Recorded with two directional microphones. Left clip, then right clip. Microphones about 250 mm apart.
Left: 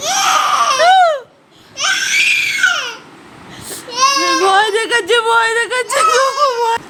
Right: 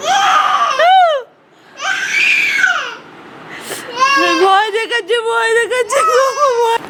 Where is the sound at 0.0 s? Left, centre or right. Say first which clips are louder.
Right 2 dB; left.